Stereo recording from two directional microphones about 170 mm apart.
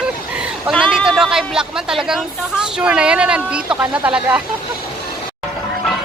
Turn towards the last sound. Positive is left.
turn(degrees=-10)  # may be behind; listen again after turning